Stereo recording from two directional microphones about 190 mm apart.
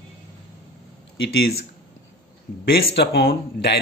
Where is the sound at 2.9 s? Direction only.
60° left (ahead or behind).